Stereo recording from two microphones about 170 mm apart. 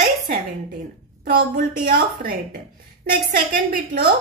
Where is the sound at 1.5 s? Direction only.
60° right (ahead or behind).